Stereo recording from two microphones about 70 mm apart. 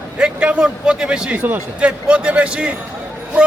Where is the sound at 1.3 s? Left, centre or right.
Right.